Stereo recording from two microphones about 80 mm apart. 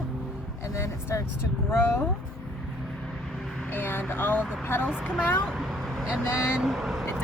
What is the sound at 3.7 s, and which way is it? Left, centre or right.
Speech, left.